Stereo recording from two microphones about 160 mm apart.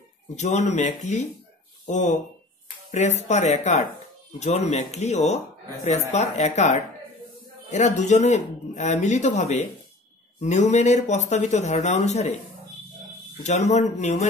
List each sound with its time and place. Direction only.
0.4 s speech: 45° left (ahead or behind)
13.4 s speech: 45° left (ahead or behind)